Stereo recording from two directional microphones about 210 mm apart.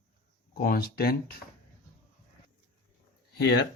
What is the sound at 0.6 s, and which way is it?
Speech, 45° left (ahead or behind).